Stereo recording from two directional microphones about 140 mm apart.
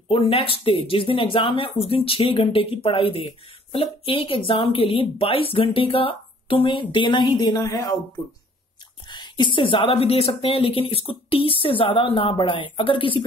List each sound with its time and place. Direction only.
0.1 s speech: 40° left (ahead or behind); by 7.9 s 20° left (ahead or behind)
9.0 s speech: 35° left (ahead or behind)